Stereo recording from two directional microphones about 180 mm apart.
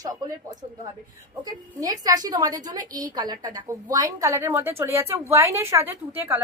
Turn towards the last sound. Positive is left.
turn(degrees=-15)  # may be behind; listen again after turning